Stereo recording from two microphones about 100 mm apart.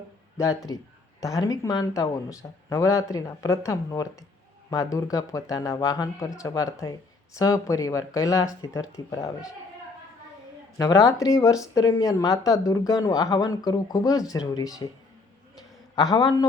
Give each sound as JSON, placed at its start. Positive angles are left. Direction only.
{"t": 0.3, "sound": "speech", "side_deg": 35}
{"t": 10.8, "sound": "speech", "side_deg": 35}
{"t": 16.0, "sound": "speech", "side_deg": 40}